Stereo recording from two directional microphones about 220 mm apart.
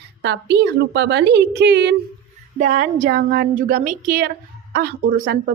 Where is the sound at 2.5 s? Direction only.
35° right (ahead or behind).